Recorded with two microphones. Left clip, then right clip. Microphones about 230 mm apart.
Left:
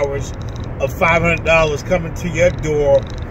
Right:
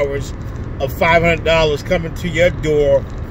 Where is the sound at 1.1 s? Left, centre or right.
Left.